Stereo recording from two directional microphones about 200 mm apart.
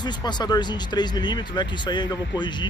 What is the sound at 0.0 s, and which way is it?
Speech, 20° left (ahead or behind).